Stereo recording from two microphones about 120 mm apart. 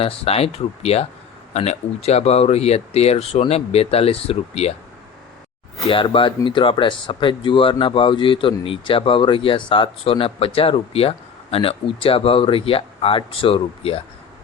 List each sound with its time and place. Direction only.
0.0 s speech: 55° left (ahead or behind)
5.9 s speech: 45° left (ahead or behind)